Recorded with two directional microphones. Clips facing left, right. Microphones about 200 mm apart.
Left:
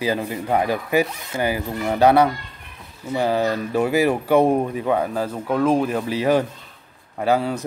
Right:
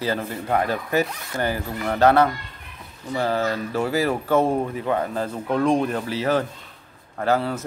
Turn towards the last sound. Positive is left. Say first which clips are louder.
# left 2 dB
turn(degrees=15)  # may be behind; listen again after turning